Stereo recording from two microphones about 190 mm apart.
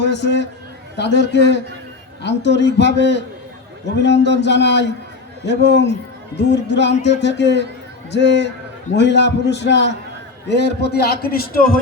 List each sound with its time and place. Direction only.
0.0 s a man's voice: 65° left (ahead or behind)